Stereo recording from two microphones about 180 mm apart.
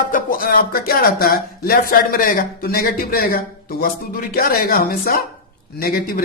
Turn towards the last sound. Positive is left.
turn(degrees=55)  # may be behind; listen again after turning